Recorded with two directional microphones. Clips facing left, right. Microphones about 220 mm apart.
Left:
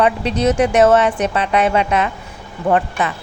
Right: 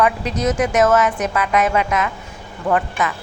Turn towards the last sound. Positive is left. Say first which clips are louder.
# left 2 dB
turn(degrees=30)  # may be behind; listen again after turning